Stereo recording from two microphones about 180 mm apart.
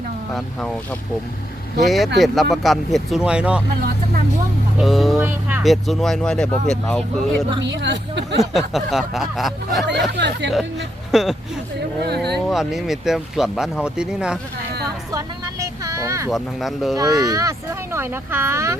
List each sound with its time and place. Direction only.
1.8 s speech: centre (ahead or behind)
4.8 s speech: centre (ahead or behind)
7.6 s speech: 75° right (ahead or behind)
8.4 s speech: centre (ahead or behind)
10.1 s speech: 70° right (ahead or behind)
11.1 s speech: centre (ahead or behind)
12.0 s speech: 65° right (ahead or behind)
12.5 s speech: centre (ahead or behind)
15.1 s vehicle: 20° right (ahead or behind)
16.3 s speech: centre (ahead or behind)
17.0 s speech: 20° right (ahead or behind)